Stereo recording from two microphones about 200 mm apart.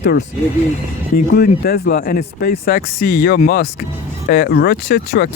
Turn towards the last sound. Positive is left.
turn(degrees=50)  # may be behind; listen again after turning